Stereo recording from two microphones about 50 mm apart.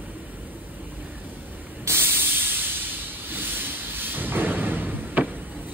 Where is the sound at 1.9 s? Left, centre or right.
Right.